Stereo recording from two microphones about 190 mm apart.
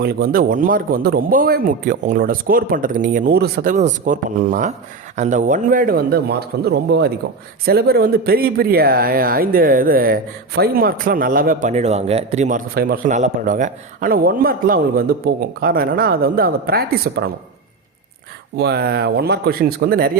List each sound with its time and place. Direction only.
0.0 s speech: 50° right (ahead or behind)
18.5 s speech: 60° right (ahead or behind)